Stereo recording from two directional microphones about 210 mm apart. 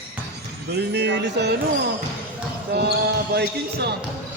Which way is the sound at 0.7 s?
50° right (ahead or behind).